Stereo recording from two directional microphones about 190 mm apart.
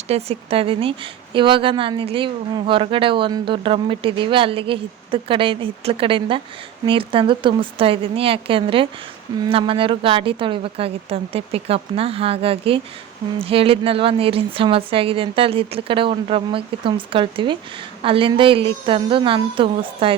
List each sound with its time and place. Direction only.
0.1 s a woman's voice: 35° right (ahead or behind)